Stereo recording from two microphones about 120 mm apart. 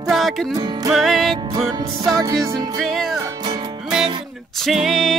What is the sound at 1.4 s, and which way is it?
Music, 35° right (ahead or behind).